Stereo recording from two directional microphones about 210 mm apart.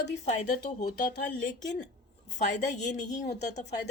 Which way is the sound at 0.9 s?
40° left (ahead or behind).